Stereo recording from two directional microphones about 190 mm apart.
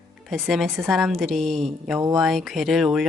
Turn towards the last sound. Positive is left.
turn(degrees=0)  # may be behind; listen again after turning